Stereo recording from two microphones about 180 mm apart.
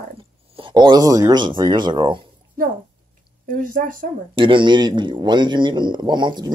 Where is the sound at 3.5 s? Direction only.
50° right (ahead or behind).